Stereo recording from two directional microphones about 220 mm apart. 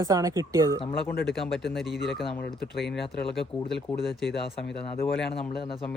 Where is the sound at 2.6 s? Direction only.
45° left (ahead or behind).